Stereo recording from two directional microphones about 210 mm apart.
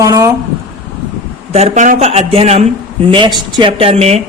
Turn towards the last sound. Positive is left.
turn(degrees=-30)  # may be behind; listen again after turning